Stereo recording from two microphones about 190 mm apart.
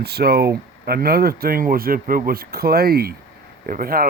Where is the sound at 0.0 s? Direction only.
55° right (ahead or behind).